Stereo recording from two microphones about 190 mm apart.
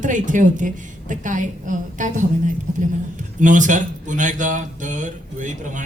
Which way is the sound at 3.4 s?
40° right (ahead or behind).